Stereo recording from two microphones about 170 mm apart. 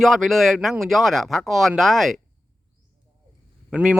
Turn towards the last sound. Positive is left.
turn(degrees=-5)  # may be behind; listen again after turning